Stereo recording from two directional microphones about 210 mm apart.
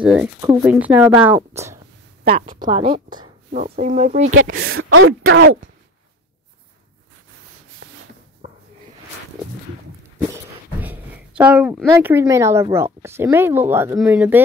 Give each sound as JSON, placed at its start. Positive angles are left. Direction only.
{"t": 0.0, "sound": "speech", "side_deg": -5}
{"t": 0.4, "sound": "a woman's voice", "side_deg": -20}
{"t": 0.7, "sound": "speech", "side_deg": -5}
{"t": 2.6, "sound": "a woman's voice", "side_deg": -25}
{"t": 3.7, "sound": "speech", "side_deg": -35}
{"t": 4.6, "sound": "speech", "side_deg": -85}
{"t": 7.8, "sound": "a sound", "side_deg": -55}
{"t": 10.1, "sound": "speech", "side_deg": -10}